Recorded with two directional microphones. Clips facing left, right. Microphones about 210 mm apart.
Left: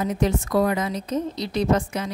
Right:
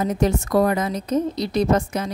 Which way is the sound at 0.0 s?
40° right (ahead or behind).